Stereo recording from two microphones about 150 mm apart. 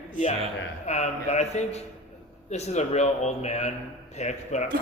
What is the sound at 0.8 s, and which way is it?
Speech, 50° left (ahead or behind).